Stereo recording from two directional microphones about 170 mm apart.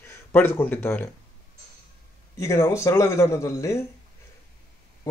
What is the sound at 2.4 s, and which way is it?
Speech, 15° left (ahead or behind).